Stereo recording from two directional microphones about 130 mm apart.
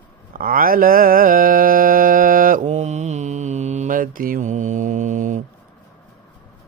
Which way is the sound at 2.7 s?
60° right (ahead or behind).